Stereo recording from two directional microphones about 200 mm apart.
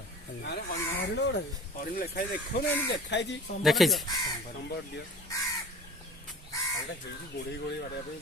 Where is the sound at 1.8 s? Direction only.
45° left (ahead or behind).